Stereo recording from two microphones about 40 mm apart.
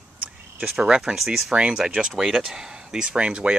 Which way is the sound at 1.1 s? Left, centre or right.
Centre.